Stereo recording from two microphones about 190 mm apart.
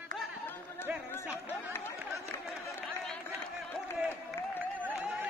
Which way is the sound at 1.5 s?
10° left (ahead or behind).